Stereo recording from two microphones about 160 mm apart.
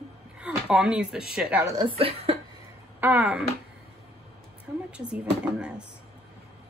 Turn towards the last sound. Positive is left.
turn(degrees=-5)  # may be behind; listen again after turning